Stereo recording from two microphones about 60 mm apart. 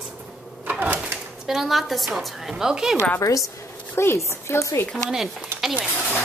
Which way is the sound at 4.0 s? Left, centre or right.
Left.